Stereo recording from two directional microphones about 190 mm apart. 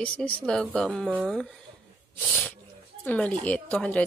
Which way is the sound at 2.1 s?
5° left (ahead or behind).